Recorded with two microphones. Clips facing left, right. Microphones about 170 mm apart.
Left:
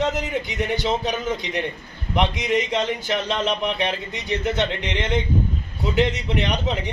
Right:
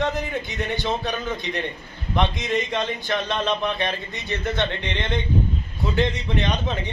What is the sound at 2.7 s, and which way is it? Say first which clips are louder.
A man's voice: left 2 dB; 15° left (ahead or behind).